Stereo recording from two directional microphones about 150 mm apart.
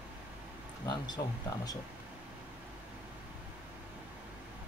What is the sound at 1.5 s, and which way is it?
Speech, 25° left (ahead or behind).